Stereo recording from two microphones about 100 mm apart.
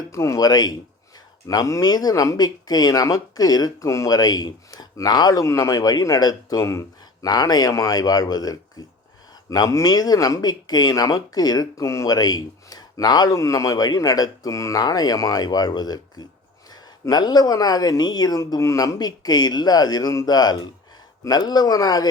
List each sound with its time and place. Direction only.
0.1 s speech: 30° left (ahead or behind)
7.3 s speech: 40° left (ahead or behind)